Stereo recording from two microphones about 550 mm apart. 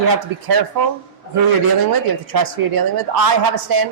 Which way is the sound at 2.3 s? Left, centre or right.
Right.